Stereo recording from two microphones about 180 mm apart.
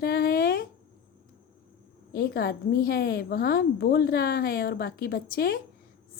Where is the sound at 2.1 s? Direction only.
55° left (ahead or behind).